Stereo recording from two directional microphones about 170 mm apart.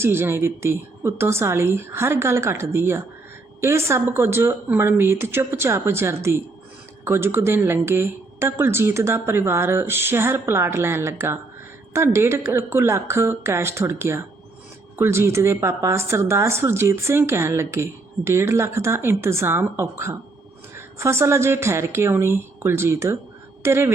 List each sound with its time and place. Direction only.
0.0 s speech: 15° right (ahead or behind)